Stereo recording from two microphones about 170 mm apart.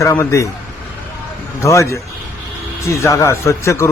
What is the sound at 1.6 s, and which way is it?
A man's voice, 15° left (ahead or behind).